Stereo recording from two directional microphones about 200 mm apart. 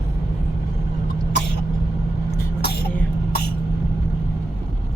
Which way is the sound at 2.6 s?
55° left (ahead or behind).